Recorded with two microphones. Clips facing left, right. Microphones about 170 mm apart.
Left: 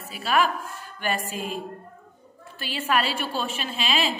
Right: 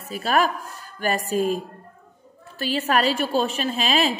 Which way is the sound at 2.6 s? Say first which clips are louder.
Right 4 dB; 40° right (ahead or behind).